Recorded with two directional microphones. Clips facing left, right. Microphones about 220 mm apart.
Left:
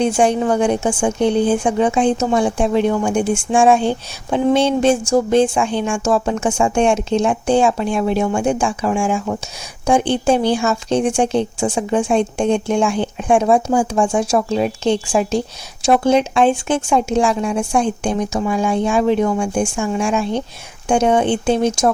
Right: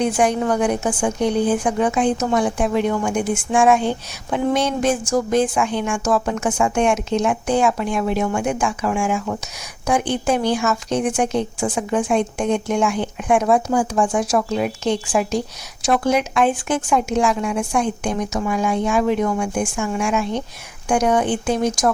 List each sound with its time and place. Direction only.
0.0 s a woman's voice: 30° left (ahead or behind)